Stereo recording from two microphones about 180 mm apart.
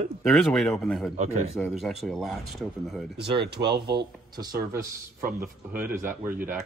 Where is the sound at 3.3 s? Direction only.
65° right (ahead or behind).